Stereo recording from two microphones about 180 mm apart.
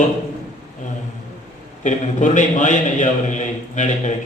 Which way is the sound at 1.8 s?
45° left (ahead or behind).